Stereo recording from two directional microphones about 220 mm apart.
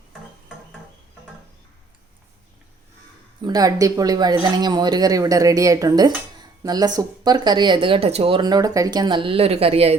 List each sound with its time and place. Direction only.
3.4 s speech: 15° right (ahead or behind)